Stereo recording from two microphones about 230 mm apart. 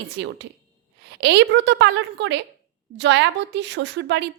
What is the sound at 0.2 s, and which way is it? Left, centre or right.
A woman's voice, right.